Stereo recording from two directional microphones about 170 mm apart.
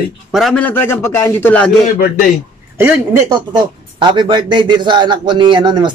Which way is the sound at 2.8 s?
15° right (ahead or behind).